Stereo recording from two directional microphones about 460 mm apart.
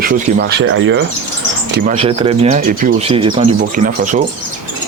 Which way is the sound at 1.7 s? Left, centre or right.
Centre.